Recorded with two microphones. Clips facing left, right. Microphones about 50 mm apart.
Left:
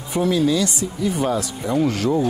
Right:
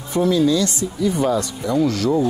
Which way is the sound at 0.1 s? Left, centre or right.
Centre.